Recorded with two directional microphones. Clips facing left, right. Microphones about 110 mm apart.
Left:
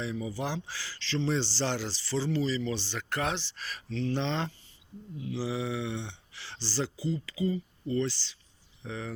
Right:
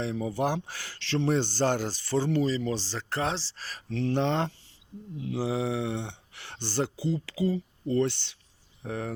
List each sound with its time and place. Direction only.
0.0 s speech: 60° right (ahead or behind); by 3.8 s 35° right (ahead or behind)
3.8 s speech: 60° right (ahead or behind)